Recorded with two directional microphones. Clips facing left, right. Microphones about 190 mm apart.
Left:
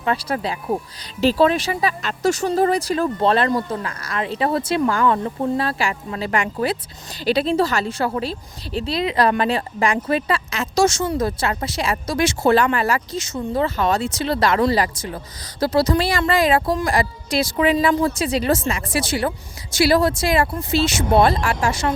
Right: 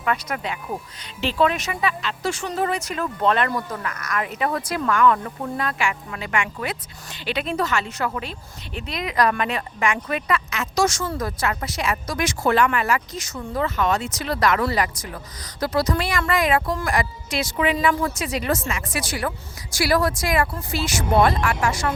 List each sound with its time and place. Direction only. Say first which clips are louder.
0.0 s speech: left 3 dB; 30° left (ahead or behind)